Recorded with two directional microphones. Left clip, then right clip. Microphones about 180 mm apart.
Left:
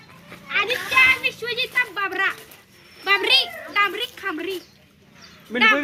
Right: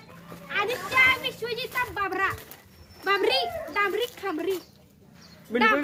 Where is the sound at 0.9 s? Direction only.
65° right (ahead or behind).